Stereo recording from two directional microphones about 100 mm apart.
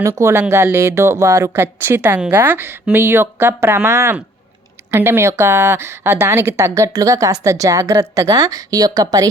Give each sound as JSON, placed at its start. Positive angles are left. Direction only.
{"t": 0.2, "sound": "a woman's voice", "side_deg": -25}